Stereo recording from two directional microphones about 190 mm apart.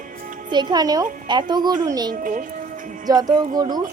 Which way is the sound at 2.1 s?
45° right (ahead or behind).